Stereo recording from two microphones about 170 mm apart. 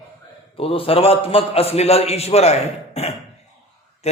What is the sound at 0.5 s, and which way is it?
A man's voice, 35° left (ahead or behind).